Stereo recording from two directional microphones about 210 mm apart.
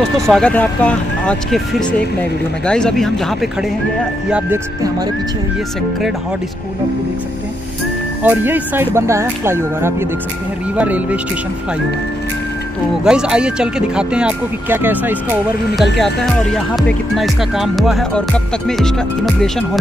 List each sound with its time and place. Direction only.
0.3 s speech: 5° left (ahead or behind)
4.3 s speech: 10° right (ahead or behind)
8.2 s speech: 10° right (ahead or behind)
13.0 s speech: 5° right (ahead or behind)
15.8 s speech: centre (ahead or behind)